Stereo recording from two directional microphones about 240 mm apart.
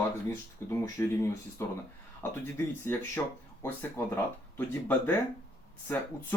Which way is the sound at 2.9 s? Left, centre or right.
Centre.